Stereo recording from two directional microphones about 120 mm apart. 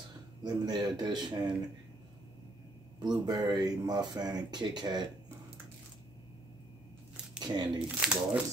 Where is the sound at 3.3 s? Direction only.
35° right (ahead or behind).